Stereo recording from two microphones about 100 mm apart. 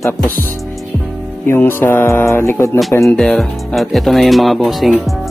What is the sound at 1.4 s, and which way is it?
Speech, 25° left (ahead or behind).